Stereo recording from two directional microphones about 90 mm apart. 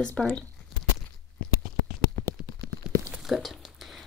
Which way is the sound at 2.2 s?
30° left (ahead or behind).